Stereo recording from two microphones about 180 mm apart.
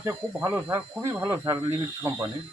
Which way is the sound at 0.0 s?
15° right (ahead or behind).